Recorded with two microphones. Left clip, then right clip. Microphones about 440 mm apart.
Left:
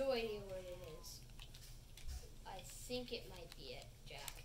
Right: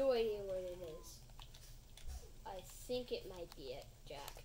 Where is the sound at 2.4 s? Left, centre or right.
Centre.